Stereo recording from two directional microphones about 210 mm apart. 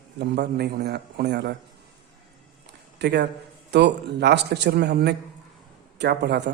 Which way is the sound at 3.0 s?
55° right (ahead or behind).